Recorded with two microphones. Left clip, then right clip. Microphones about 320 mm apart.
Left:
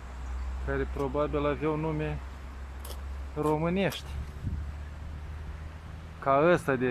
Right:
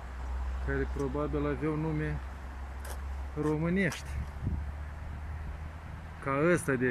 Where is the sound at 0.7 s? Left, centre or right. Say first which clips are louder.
Left 2 dB; centre.